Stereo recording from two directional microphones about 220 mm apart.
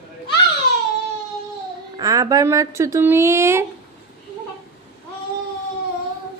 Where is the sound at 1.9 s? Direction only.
15° right (ahead or behind).